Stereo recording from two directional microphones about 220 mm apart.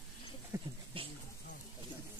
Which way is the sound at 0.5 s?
10° right (ahead or behind).